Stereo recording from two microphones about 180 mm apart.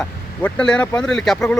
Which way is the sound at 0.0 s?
5° left (ahead or behind).